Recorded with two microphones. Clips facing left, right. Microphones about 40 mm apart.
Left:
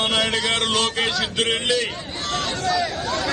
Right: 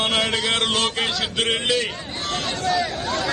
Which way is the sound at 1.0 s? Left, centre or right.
Centre.